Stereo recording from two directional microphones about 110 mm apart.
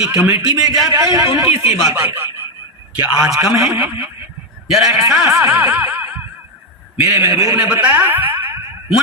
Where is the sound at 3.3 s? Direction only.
30° right (ahead or behind).